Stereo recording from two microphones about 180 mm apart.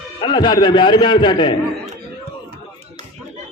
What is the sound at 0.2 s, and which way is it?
A man's voice, 25° left (ahead or behind).